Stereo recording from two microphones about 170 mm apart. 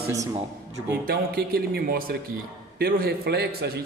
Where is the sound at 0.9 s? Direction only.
65° right (ahead or behind).